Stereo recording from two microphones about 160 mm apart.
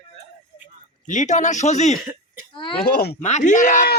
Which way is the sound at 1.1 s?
50° left (ahead or behind).